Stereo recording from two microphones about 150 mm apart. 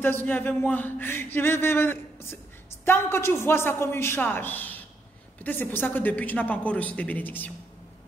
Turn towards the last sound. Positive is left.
turn(degrees=10)  # may be behind; listen again after turning